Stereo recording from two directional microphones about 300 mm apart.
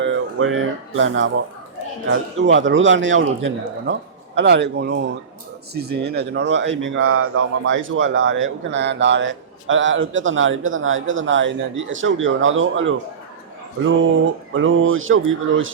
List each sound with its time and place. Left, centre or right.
0.0 s speech: right
14.5 s speech: right